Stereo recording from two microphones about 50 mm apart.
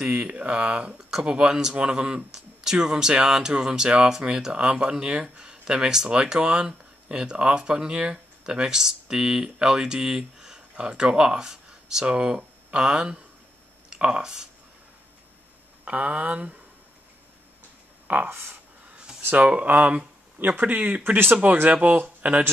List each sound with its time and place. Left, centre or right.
0.1 s speech: right; by 14.5 s centre
15.8 s speech: right
18.0 s speech: right
20.3 s speech: right
20.6 s speech: right